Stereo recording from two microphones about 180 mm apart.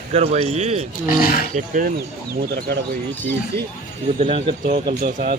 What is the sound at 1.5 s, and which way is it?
Speech, 50° right (ahead or behind).